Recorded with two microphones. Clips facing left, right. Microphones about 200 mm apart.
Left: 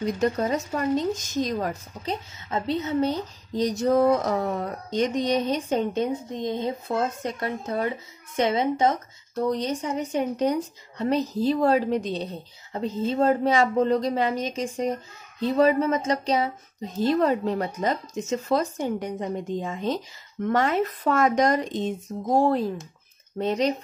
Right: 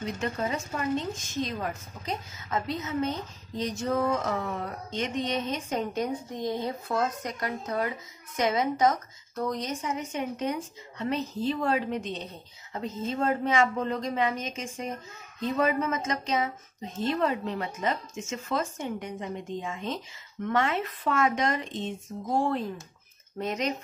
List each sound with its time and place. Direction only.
0.0 s a woman's voice: 40° left (ahead or behind)